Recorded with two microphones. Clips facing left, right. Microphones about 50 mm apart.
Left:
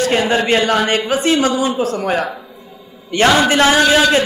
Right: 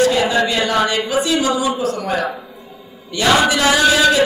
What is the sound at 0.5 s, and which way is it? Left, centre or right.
Speech, left.